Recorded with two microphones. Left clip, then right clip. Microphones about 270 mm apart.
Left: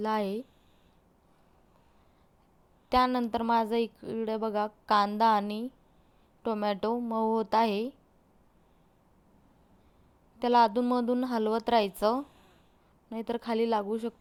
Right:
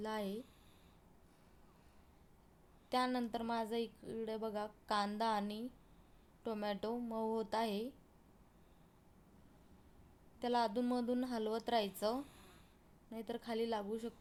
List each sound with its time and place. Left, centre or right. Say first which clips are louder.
0.0 s a woman's voice: left 12 dB; left
2.9 s a woman's voice: left 11 dB; left
10.4 s a woman's voice: left 13 dB; left
12.2 s a sound: left 8 dB; centre
13.1 s a woman's voice: left 11 dB; left